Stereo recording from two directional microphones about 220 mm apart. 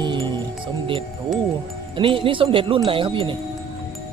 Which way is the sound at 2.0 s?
25° right (ahead or behind).